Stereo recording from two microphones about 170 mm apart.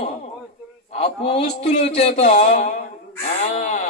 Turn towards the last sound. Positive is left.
turn(degrees=45)  # may be behind; listen again after turning